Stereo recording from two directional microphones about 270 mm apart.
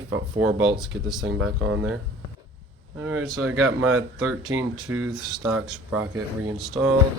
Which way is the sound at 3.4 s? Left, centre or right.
Right.